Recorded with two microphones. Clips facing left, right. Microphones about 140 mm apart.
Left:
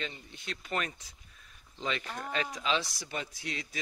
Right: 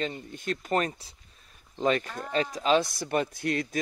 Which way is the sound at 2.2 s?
35° right (ahead or behind).